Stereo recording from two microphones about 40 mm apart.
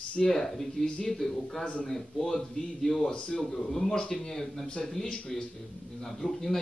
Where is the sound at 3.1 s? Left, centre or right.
Centre.